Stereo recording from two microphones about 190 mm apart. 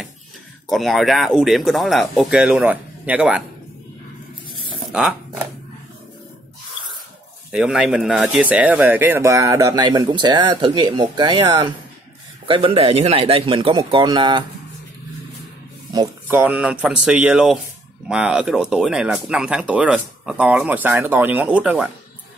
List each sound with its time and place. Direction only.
0.7 s speech: centre (ahead or behind)
4.9 s speech: 5° right (ahead or behind)
7.5 s speech: 5° right (ahead or behind); by 14.4 s 25° right (ahead or behind)
16.3 s speech: 10° right (ahead or behind)